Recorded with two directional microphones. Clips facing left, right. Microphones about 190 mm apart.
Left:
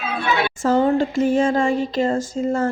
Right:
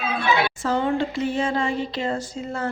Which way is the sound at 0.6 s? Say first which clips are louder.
Left 5 dB; 45° left (ahead or behind).